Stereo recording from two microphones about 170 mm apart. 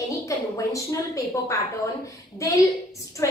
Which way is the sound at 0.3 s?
20° left (ahead or behind).